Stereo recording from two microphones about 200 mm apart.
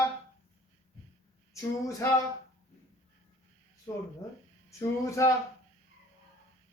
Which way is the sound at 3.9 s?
15° left (ahead or behind).